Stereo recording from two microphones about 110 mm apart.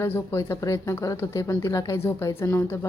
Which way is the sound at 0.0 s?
25° left (ahead or behind).